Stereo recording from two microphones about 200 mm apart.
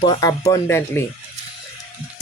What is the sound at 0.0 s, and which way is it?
Speech, 20° left (ahead or behind).